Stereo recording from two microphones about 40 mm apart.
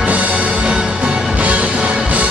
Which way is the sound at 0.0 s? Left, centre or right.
Right.